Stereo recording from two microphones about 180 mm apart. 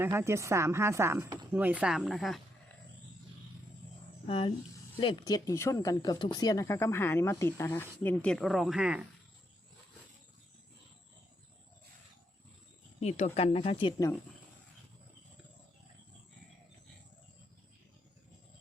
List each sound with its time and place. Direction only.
0.0 s a woman's voice: 15° right (ahead or behind)
4.3 s speech: 30° left (ahead or behind); by 9.0 s 5° right (ahead or behind)
13.0 s speech: 35° left (ahead or behind)